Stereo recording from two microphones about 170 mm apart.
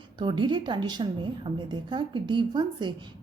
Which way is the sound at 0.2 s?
30° right (ahead or behind).